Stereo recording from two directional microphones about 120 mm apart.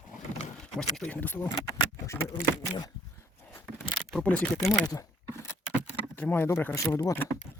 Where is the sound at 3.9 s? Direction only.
5° left (ahead or behind).